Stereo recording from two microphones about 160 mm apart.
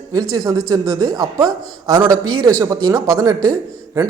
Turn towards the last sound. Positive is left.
turn(degrees=-25)  # may be behind; listen again after turning